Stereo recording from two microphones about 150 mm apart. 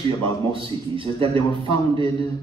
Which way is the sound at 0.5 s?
35° right (ahead or behind).